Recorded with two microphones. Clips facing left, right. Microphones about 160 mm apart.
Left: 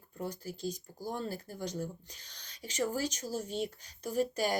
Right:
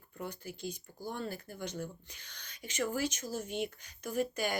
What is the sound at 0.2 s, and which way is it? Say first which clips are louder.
Speech: left 3 dB; 35° left (ahead or behind).